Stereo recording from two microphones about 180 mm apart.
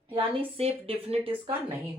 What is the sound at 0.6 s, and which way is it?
Speech, 35° right (ahead or behind).